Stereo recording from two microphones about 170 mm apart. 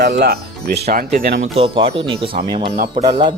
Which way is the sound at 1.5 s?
35° right (ahead or behind).